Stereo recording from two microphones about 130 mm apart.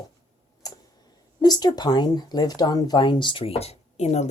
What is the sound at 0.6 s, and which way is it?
Tick-tock, 30° left (ahead or behind).